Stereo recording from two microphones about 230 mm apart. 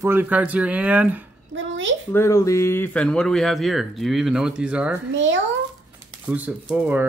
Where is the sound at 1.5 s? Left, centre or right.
Right.